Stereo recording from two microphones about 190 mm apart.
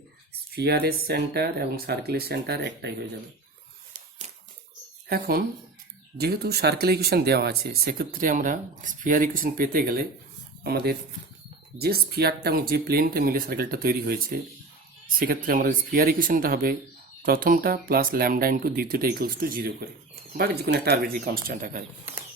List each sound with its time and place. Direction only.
0.5 s speech: 55° right (ahead or behind)
5.0 s speech: 55° right (ahead or behind)